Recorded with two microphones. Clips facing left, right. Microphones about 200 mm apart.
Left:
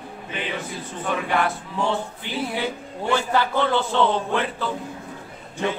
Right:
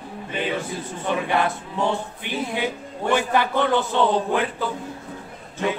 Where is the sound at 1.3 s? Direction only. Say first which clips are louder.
Right 1 dB; 20° right (ahead or behind).